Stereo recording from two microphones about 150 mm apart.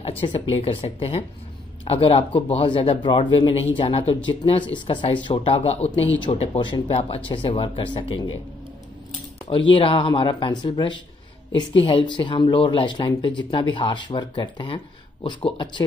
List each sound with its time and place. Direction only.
0.2 s speech: 40° left (ahead or behind)
9.5 s speech: 35° left (ahead or behind)